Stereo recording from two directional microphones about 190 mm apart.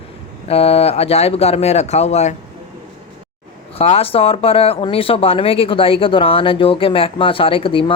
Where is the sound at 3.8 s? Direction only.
30° left (ahead or behind).